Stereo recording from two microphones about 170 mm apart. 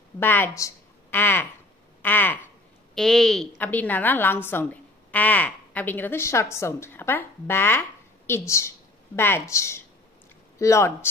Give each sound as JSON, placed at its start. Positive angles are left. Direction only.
{"t": 0.2, "sound": "speech", "side_deg": 10}
{"t": 2.0, "sound": "a sound", "side_deg": 10}
{"t": 2.9, "sound": "a woman's voice", "side_deg": 5}